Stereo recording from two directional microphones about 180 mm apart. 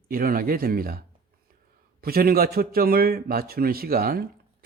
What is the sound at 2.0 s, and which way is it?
A man's voice, 55° right (ahead or behind).